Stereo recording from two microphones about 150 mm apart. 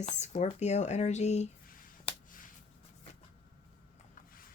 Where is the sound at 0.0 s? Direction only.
55° left (ahead or behind).